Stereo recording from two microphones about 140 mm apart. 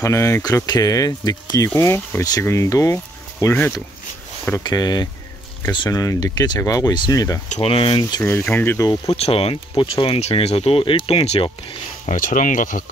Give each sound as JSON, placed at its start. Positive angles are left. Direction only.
{"t": 0.0, "sound": "speech", "side_deg": 20}
{"t": 4.6, "sound": "speech", "side_deg": 30}
{"t": 7.6, "sound": "speech", "side_deg": 40}
{"t": 8.2, "sound": "speech", "side_deg": 20}
{"t": 9.1, "sound": "speech", "side_deg": 45}
{"t": 12.1, "sound": "speech", "side_deg": 70}